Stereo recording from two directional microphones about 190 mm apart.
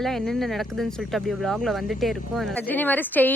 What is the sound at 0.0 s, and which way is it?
Speech, centre (ahead or behind).